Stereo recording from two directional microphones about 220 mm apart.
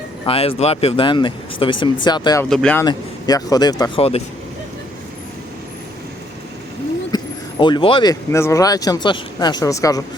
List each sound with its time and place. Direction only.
0.3 s speech: 25° left (ahead or behind)
2.5 s speech: 5° left (ahead or behind)
2.8 s speech: 15° left (ahead or behind)
7.1 s a sound: 20° left (ahead or behind)
7.6 s speech: 25° left (ahead or behind)